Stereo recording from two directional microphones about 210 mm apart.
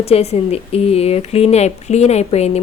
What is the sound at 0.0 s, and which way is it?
Speech, 30° left (ahead or behind).